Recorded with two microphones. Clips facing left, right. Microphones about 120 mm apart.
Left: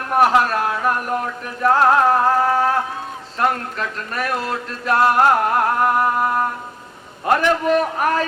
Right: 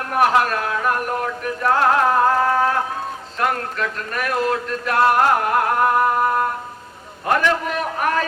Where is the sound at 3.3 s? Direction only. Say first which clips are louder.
Left 1 dB; 35° left (ahead or behind).